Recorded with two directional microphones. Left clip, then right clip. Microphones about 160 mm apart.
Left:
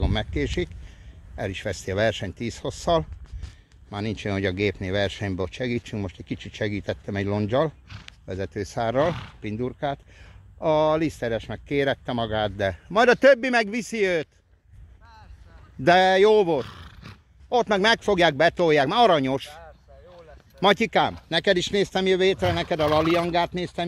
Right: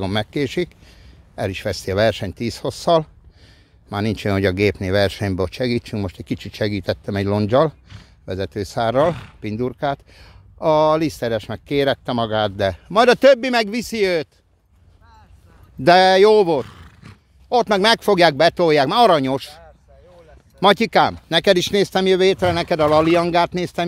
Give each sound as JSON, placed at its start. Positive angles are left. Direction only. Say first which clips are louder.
{"t": 0.0, "sound": "speech", "louder": "right 6 dB", "side_deg": -40}
{"t": 3.9, "sound": "speech", "louder": "right 7 dB", "side_deg": -50}
{"t": 6.1, "sound": "speech", "louder": "right 6 dB", "side_deg": -45}
{"t": 8.3, "sound": "speech", "louder": "right 6 dB", "side_deg": -30}
{"t": 15.8, "sound": "speech", "louder": "right 5 dB", "side_deg": -35}
{"t": 16.6, "sound": "roar", "louder": "even", "side_deg": 5}
{"t": 17.5, "sound": "speech", "louder": "right 5 dB", "side_deg": -30}
{"t": 20.6, "sound": "speech", "louder": "right 6 dB", "side_deg": -30}